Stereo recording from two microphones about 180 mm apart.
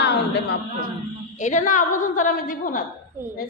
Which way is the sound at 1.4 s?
45° left (ahead or behind).